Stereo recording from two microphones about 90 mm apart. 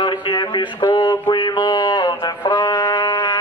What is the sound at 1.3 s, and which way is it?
Music, 55° left (ahead or behind).